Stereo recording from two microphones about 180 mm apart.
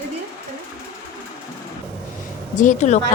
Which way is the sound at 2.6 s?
40° left (ahead or behind).